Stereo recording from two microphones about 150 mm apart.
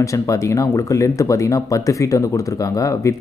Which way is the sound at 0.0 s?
20° left (ahead or behind).